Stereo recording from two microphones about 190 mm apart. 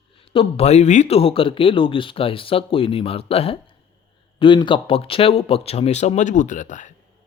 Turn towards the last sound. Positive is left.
turn(degrees=40)  # may be behind; listen again after turning